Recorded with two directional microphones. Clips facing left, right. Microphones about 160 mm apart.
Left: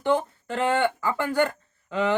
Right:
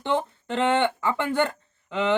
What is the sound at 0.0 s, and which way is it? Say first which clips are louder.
Speech: left 2 dB; 25° right (ahead or behind).